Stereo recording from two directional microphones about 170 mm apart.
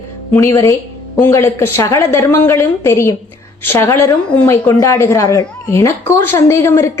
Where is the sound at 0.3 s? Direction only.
15° left (ahead or behind).